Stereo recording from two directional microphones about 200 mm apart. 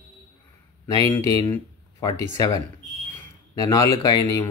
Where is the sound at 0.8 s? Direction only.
15° left (ahead or behind).